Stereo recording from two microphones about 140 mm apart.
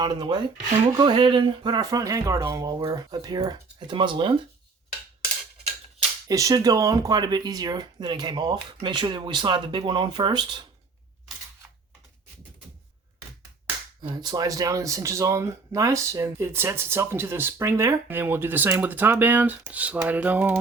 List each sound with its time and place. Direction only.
0.0 s speech: 30° right (ahead or behind)
6.2 s speech: 25° right (ahead or behind)
14.0 s speech: 30° right (ahead or behind); by 20.6 s 10° right (ahead or behind)